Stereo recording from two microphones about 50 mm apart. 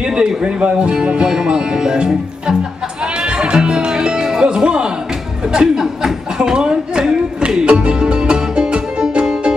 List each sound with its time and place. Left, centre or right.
0.1 s speech: centre
3.3 s music: centre
5.5 s a sound: centre
7.6 s music: right